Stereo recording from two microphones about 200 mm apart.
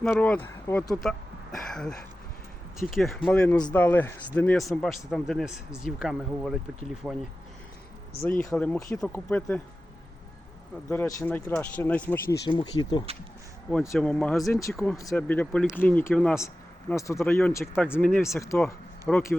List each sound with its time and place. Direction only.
0.0 s speech: 5° left (ahead or behind)
8.2 s speech: 10° left (ahead or behind)
10.8 s speech: 15° left (ahead or behind)
12.5 s speech: 20° left (ahead or behind)
13.9 s speech: 5° left (ahead or behind)
14.9 s speech: 10° left (ahead or behind)
16.9 s speech: 15° left (ahead or behind)
19.1 s speech: 5° left (ahead or behind)